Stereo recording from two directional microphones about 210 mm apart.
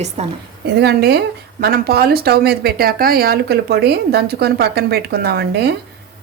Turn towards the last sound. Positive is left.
turn(degrees=-50)  # may be behind; listen again after turning